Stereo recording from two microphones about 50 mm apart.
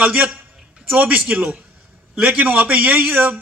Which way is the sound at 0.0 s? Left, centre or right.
Right.